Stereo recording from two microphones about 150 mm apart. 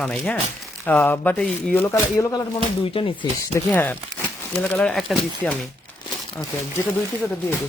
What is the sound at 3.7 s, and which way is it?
Speech, 15° left (ahead or behind).